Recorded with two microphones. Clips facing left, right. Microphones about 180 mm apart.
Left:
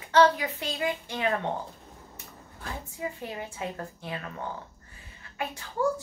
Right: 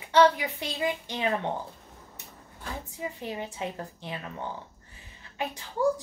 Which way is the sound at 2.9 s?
20° right (ahead or behind).